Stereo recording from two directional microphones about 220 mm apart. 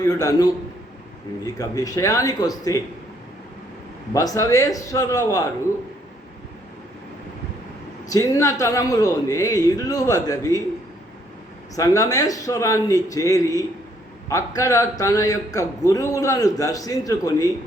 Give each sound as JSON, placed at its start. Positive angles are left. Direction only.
{"t": 0.0, "sound": "speech", "side_deg": 15}
{"t": 1.5, "sound": "speech", "side_deg": 15}
{"t": 4.1, "sound": "speech", "side_deg": 15}
{"t": 8.1, "sound": "speech", "side_deg": 15}
{"t": 11.7, "sound": "speech", "side_deg": 15}